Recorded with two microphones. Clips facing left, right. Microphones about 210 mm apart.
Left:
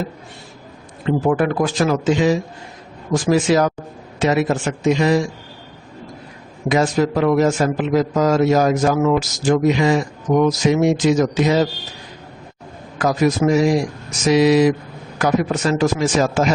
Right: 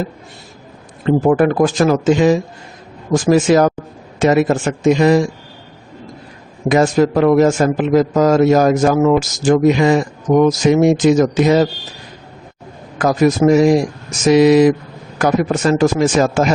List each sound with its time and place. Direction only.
1.0 s a man's voice: 45° right (ahead or behind)
6.7 s a man's voice: 50° right (ahead or behind)
13.0 s a man's voice: 50° right (ahead or behind)